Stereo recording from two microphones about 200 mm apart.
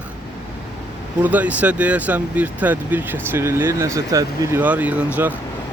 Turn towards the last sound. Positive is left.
turn(degrees=-10)  # may be behind; listen again after turning